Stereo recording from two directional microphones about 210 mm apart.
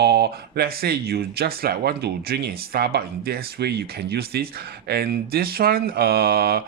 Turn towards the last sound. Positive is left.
turn(degrees=-45)  # may be behind; listen again after turning